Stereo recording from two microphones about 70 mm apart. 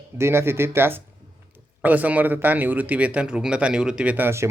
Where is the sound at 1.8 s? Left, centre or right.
Right.